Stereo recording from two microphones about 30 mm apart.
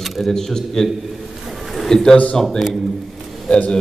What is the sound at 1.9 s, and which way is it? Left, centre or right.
Speech, centre.